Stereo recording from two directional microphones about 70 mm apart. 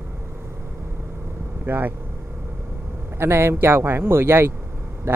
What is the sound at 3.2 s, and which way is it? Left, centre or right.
Speech, right.